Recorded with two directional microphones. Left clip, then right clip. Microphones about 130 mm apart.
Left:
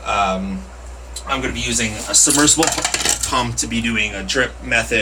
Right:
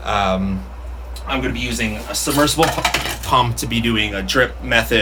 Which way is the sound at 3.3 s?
30° right (ahead or behind).